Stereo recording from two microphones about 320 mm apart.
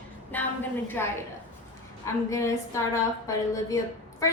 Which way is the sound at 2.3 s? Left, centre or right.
Centre.